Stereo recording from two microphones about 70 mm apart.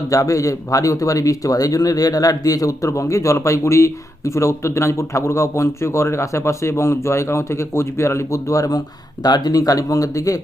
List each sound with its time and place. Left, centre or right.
0.1 s speech: left
9.2 s speech: left